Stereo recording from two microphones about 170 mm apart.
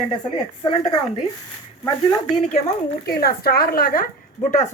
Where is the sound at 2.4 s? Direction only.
40° left (ahead or behind).